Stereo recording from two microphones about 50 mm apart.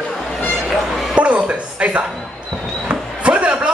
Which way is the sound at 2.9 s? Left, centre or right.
Right.